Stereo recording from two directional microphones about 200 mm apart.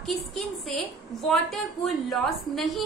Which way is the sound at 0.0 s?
Centre (ahead or behind).